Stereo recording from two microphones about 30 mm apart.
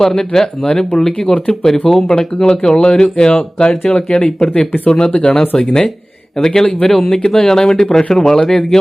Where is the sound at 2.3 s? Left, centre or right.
Left.